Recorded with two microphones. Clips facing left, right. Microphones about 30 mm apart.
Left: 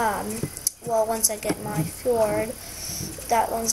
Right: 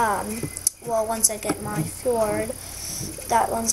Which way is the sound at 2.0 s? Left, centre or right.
Right.